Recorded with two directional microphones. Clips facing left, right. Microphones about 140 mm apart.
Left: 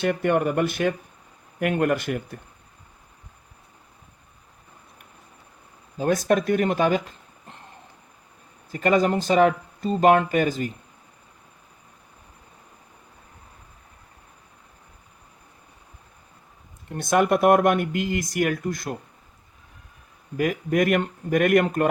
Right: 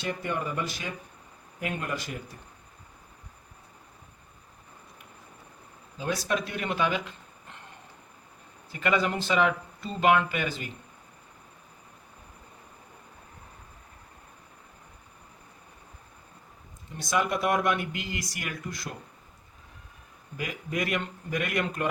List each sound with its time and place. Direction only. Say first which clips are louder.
0.0 s speech: left 10 dB; 65° left (ahead or behind)
6.0 s speech: left 8 dB; 50° left (ahead or behind)
8.7 s speech: left 7 dB; 40° left (ahead or behind)
16.9 s speech: left 8 dB; 55° left (ahead or behind)
20.3 s speech: left 11 dB; 55° left (ahead or behind)